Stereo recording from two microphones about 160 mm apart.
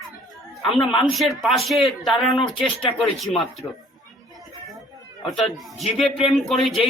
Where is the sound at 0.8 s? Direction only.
35° left (ahead or behind).